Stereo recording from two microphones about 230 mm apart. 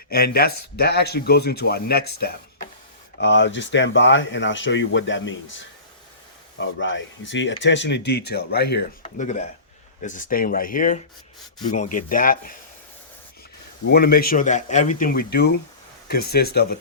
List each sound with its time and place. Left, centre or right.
0.1 s speech: left
9.0 s a man's voice: left
13.9 s a man's voice: left